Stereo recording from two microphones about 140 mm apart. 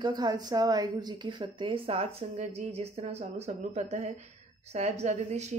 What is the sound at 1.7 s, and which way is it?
Speech, 45° right (ahead or behind).